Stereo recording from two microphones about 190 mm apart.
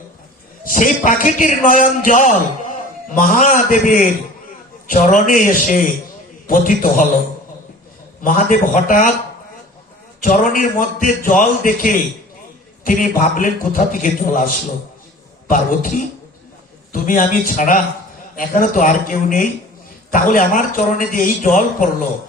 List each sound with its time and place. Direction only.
0.6 s a man's voice: 45° left (ahead or behind)
8.2 s a man's voice: 45° left (ahead or behind)
10.2 s a man's voice: 45° left (ahead or behind)